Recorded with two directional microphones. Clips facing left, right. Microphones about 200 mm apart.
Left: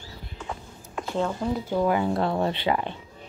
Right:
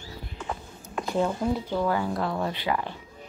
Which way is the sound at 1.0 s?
10° right (ahead or behind).